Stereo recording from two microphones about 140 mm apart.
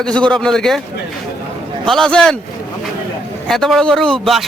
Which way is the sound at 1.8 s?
5° left (ahead or behind).